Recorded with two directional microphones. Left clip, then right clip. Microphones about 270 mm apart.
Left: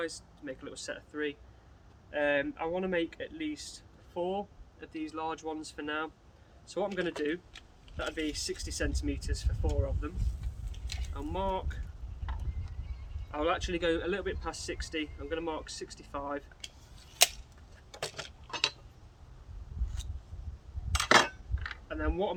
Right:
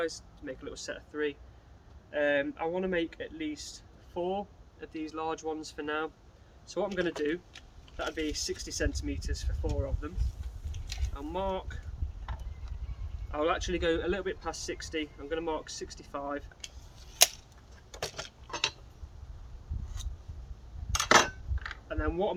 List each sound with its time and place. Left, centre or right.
0.0 s speech: centre
10.7 s mechanisms: centre
12.3 s boat: centre
13.3 s speech: centre
17.9 s tick-tock: centre
20.0 s a sound: centre
20.9 s cutlery: centre